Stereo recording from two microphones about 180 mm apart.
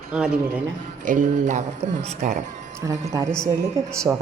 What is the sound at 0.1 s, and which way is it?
Speech, 5° right (ahead or behind).